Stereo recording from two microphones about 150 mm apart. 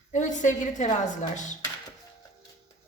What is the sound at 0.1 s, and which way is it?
A woman's voice, 55° left (ahead or behind).